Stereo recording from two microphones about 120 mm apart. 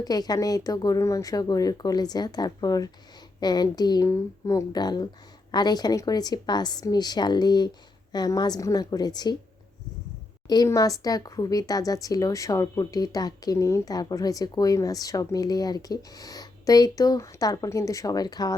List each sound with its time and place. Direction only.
0.0 s speech: 35° left (ahead or behind)
10.4 s a woman's voice: 35° left (ahead or behind)